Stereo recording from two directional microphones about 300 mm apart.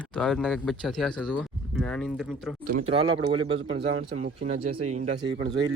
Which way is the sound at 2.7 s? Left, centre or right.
Right.